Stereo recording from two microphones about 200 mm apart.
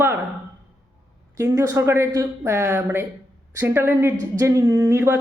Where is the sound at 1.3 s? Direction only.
15° right (ahead or behind).